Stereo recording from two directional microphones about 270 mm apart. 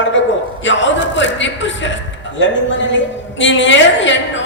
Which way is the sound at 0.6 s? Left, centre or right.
Left.